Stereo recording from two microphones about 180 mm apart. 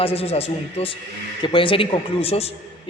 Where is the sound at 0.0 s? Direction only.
35° left (ahead or behind).